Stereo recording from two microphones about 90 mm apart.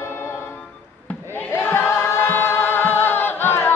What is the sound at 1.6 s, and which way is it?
Choir, 25° left (ahead or behind).